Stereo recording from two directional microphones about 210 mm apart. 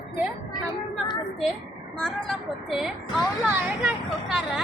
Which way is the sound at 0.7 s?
20° left (ahead or behind).